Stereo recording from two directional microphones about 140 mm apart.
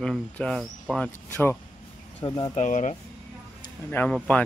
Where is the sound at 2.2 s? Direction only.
30° left (ahead or behind).